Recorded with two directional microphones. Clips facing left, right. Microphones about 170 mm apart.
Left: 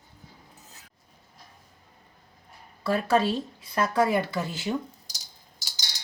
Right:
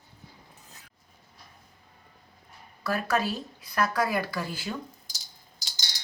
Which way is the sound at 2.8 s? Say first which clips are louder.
Left 4 dB; 25° left (ahead or behind).